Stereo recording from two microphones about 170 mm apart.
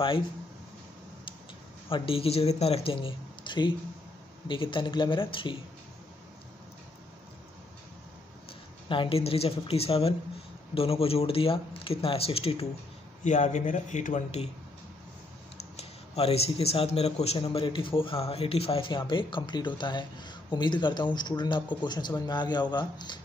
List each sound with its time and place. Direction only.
1.9 s a man's voice: 30° left (ahead or behind)
8.8 s a man's voice: 30° left (ahead or behind)
13.2 s a man's voice: 45° left (ahead or behind)
15.7 s a man's voice: 35° left (ahead or behind)